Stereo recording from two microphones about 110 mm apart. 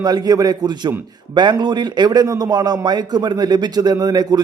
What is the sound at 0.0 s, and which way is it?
Speech, 35° right (ahead or behind).